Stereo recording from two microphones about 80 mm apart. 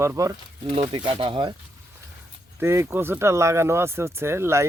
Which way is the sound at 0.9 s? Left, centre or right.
Right.